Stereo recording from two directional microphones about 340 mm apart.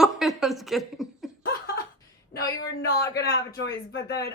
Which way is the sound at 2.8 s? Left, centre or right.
Left.